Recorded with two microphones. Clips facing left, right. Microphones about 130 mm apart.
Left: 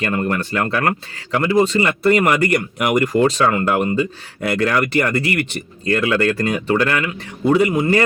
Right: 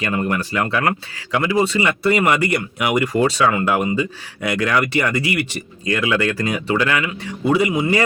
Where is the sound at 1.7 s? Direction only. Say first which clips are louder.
Left 2 dB; 40° left (ahead or behind).